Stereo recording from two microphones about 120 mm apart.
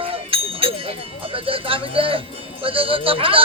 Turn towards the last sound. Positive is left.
turn(degrees=-50)  # may be behind; listen again after turning